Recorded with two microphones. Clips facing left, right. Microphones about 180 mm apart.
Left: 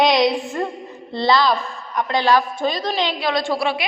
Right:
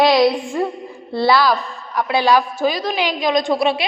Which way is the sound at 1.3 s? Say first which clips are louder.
Right 1 dB; 5° right (ahead or behind).